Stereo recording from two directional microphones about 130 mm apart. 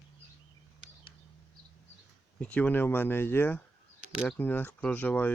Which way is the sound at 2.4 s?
10° left (ahead or behind).